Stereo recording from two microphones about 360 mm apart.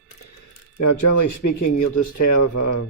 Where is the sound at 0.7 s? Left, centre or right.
Left.